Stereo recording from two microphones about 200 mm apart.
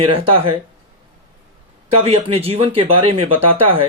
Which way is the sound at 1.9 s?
30° right (ahead or behind).